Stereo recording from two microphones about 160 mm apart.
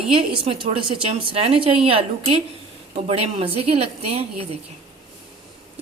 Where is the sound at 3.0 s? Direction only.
40° right (ahead or behind).